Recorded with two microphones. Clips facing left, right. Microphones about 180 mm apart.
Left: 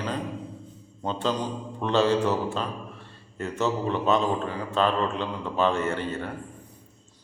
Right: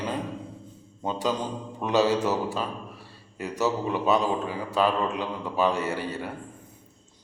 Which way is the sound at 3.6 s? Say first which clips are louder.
Even; 10° right (ahead or behind).